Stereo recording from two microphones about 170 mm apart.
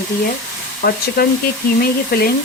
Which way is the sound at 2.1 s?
65° left (ahead or behind).